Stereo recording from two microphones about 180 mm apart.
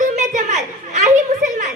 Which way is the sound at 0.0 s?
40° right (ahead or behind).